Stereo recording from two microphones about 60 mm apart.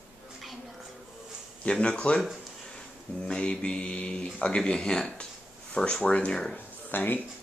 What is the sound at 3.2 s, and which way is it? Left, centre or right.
Speech, centre.